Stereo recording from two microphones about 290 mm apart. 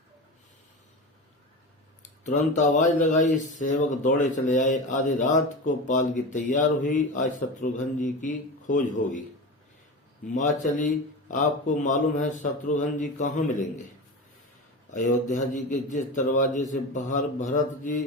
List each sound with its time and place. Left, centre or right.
2.0 s speech: left
10.3 s speech: left
14.8 s speech: left